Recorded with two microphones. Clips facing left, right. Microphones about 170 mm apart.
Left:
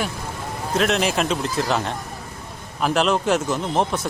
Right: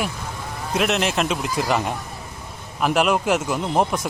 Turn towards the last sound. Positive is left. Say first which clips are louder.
# right 1 dB
turn(degrees=-10)  # may be behind; listen again after turning